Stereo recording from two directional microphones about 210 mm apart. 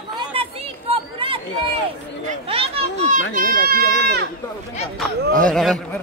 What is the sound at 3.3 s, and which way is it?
Speech, 40° right (ahead or behind).